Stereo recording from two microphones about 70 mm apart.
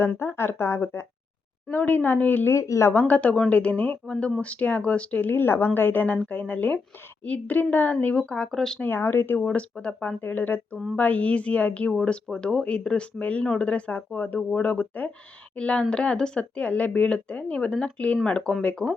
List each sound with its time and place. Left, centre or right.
0.0 s speech: left
1.7 s speech: left
2.5 s speech: left
2.9 s speech: left
4.0 s speech: centre
8.8 s speech: left
9.5 s speech: centre
10.2 s speech: left